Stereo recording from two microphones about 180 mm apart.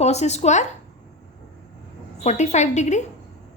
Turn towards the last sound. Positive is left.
turn(degrees=40)  # may be behind; listen again after turning